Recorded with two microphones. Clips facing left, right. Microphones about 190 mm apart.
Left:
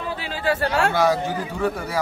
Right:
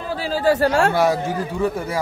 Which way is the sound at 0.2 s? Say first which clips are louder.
Right 7 dB; 40° right (ahead or behind).